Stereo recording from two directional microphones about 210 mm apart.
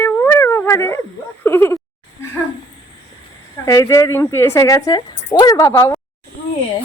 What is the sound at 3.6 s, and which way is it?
A woman's voice, 15° left (ahead or behind).